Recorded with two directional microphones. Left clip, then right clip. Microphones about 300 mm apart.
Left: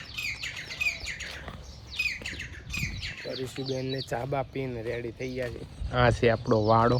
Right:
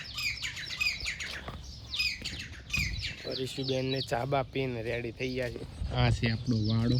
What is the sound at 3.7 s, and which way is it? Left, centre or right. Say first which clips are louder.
Speech: right 1 dB; centre.